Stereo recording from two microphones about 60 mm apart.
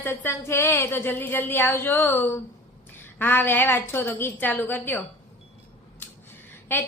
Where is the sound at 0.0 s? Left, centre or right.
Left.